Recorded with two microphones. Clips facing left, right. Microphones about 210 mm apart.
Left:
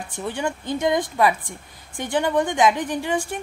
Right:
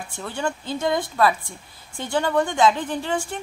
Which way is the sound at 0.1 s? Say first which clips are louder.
Left 1 dB; 15° left (ahead or behind).